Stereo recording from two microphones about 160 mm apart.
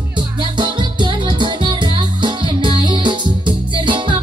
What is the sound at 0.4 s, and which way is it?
Music, 30° right (ahead or behind).